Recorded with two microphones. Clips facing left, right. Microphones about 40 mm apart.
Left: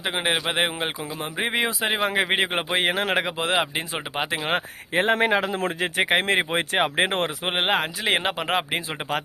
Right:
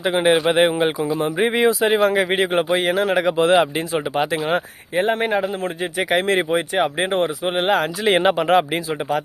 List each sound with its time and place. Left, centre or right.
0.0 s speech: centre
2.1 s speech: left
3.2 s speech: centre
3.8 s speech: centre
4.9 s speech: left
6.0 s speech: left
6.6 s speech: left
7.5 s speech: left
8.0 s speech: centre